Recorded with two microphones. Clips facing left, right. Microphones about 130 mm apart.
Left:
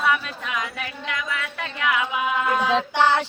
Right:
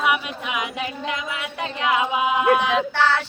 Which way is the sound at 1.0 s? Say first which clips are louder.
Right 1 dB; 20° right (ahead or behind).